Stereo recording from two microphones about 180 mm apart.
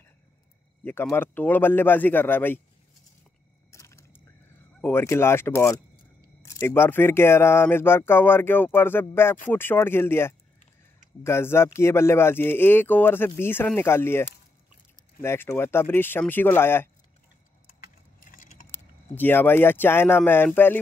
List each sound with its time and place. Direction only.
0.8 s speech: 15° left (ahead or behind)
3.7 s a sound: 15° left (ahead or behind)
4.8 s speech: 15° left (ahead or behind)
15.2 s speech: 15° left (ahead or behind)
18.2 s keys jangling: 45° left (ahead or behind)
18.7 s speech: 10° left (ahead or behind)